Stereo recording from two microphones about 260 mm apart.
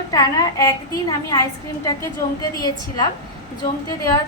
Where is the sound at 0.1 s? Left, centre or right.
Centre.